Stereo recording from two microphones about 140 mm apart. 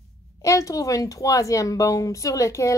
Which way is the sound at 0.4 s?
25° left (ahead or behind).